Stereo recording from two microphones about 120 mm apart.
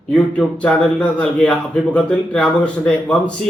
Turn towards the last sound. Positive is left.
turn(degrees=5)  # may be behind; listen again after turning